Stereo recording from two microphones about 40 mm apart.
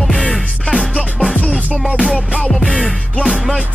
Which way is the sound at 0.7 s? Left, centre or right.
Centre.